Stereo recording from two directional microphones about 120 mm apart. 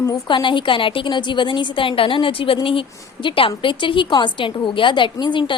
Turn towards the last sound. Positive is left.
turn(degrees=40)  # may be behind; listen again after turning